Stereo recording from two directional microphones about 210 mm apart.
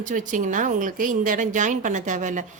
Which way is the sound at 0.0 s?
40° right (ahead or behind).